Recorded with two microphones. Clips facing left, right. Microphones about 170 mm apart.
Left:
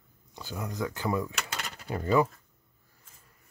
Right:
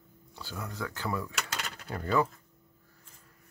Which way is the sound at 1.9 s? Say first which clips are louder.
Left 3 dB; 10° left (ahead or behind).